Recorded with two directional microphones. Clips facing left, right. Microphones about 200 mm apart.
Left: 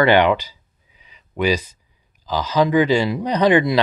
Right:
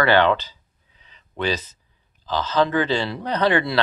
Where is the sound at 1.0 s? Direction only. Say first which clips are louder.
Left 5 dB; 10° left (ahead or behind).